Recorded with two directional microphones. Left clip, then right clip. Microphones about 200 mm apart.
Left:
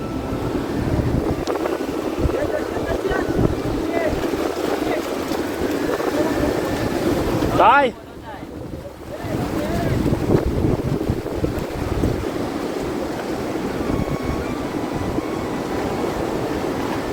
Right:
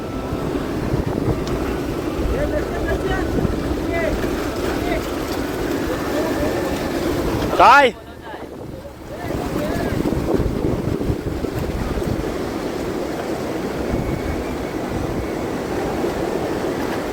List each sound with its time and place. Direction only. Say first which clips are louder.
7.6 s speech: right 4 dB; 5° right (ahead or behind)